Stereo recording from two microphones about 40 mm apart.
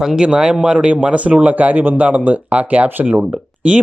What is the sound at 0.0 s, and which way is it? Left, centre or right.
Speech, centre.